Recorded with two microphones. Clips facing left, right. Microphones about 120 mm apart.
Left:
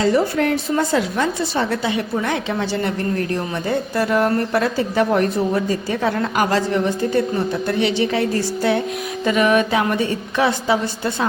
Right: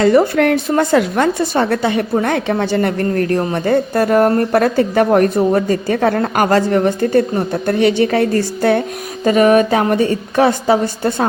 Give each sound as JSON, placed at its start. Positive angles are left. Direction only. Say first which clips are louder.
{"t": 0.0, "sound": "a woman's voice", "louder": "right 6 dB", "side_deg": -60}